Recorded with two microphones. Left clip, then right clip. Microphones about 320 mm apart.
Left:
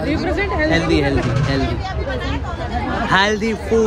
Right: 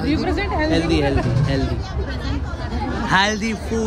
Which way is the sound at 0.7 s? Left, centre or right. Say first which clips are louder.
Left 3 dB; centre.